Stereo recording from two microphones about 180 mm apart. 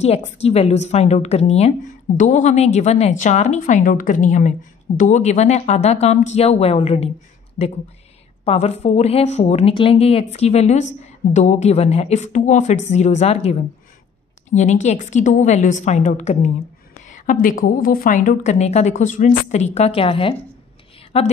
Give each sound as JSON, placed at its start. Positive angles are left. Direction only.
{"t": 0.0, "sound": "a woman's voice", "side_deg": 35}